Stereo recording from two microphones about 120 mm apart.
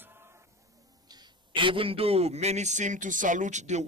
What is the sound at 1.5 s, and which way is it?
A man's voice, 45° right (ahead or behind).